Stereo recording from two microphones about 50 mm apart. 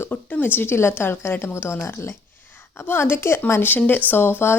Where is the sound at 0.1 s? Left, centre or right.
Left.